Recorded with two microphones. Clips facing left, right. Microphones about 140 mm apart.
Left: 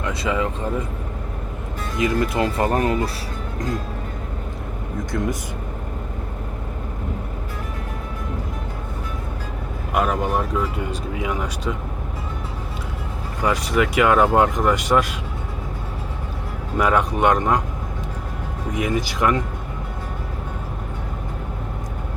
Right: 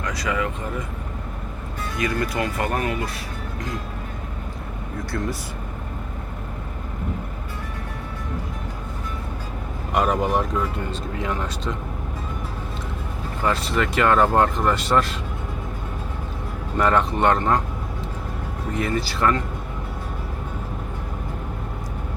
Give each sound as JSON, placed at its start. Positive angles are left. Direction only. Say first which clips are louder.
{"t": 0.0, "sound": "speech", "louder": "left 2 dB", "side_deg": 25}
{"t": 2.0, "sound": "speech", "louder": "left 4 dB", "side_deg": 20}
{"t": 5.1, "sound": "speech", "louder": "left 3 dB", "side_deg": 20}
{"t": 9.9, "sound": "speech", "louder": "even", "side_deg": 0}
{"t": 13.4, "sound": "speech", "louder": "left 3 dB", "side_deg": 15}
{"t": 16.7, "sound": "speech", "louder": "left 1 dB", "side_deg": 10}
{"t": 18.7, "sound": "speech", "louder": "left 2 dB", "side_deg": 15}